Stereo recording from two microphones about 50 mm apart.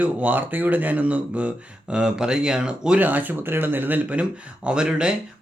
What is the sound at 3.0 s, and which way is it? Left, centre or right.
Speech, right.